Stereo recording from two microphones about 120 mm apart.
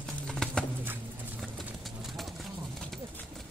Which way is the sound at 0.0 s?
5° left (ahead or behind).